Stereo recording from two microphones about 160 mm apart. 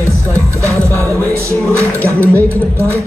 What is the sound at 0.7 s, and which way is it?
Music, 20° right (ahead or behind).